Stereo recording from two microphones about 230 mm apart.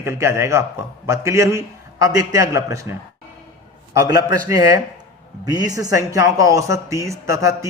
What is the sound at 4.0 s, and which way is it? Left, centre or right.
Speech, centre.